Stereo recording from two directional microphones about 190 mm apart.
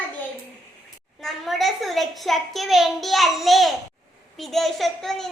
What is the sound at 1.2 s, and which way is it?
A child's voice, centre (ahead or behind).